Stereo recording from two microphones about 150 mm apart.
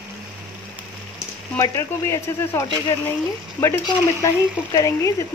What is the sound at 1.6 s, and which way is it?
Speech, 20° left (ahead or behind).